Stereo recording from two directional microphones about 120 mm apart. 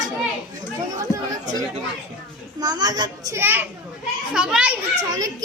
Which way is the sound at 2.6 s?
35° right (ahead or behind).